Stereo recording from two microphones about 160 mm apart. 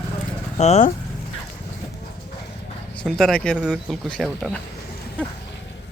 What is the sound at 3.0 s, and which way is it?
Speech, 5° left (ahead or behind).